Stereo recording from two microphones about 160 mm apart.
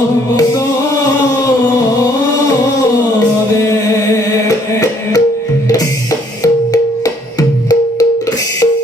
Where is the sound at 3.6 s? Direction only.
20° left (ahead or behind).